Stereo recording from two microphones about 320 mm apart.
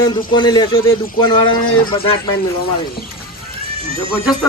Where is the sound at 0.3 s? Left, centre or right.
Centre.